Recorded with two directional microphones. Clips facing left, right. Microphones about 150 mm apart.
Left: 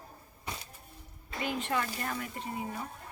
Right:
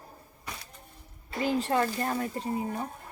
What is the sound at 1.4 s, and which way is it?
Speech, 35° right (ahead or behind).